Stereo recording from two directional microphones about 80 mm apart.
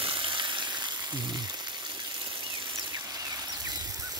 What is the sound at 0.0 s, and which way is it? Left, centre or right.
Frying, right.